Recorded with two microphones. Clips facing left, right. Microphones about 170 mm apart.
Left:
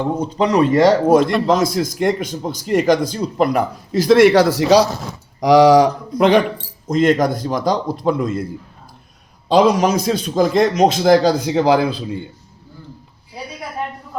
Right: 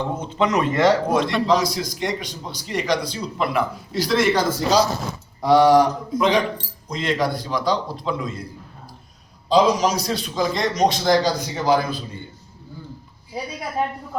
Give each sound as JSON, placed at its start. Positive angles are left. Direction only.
{"t": 0.2, "sound": "a man's voice", "side_deg": 40}
{"t": 4.2, "sound": "speech", "side_deg": 70}
{"t": 5.4, "sound": "speech", "side_deg": 90}
{"t": 6.1, "sound": "a man's voice", "side_deg": 65}
{"t": 6.8, "sound": "a man's voice", "side_deg": 45}
{"t": 9.5, "sound": "a man's voice", "side_deg": 60}